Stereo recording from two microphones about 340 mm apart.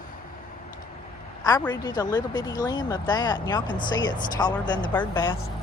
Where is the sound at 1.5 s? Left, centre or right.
Centre.